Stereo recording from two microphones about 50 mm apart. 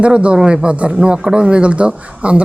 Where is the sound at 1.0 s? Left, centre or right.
Centre.